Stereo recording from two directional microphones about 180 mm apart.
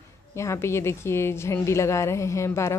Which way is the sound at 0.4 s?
15° left (ahead or behind).